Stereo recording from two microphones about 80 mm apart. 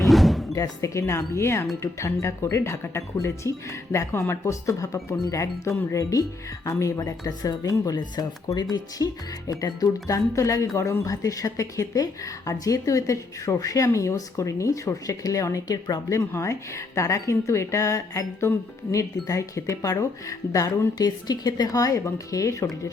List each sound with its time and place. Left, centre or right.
0.0 s thunk: centre
0.5 s a woman's voice: left
7.9 s speech: left
9.0 s a woman's voice: left
21.0 s a woman's voice: left